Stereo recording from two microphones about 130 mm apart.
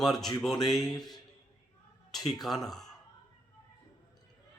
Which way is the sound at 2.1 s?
Centre (ahead or behind).